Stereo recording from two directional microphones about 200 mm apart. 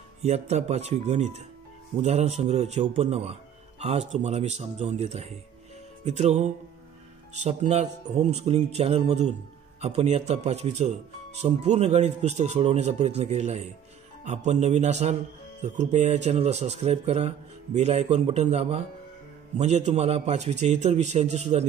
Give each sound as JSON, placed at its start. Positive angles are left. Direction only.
{"t": 0.2, "sound": "speech", "side_deg": -35}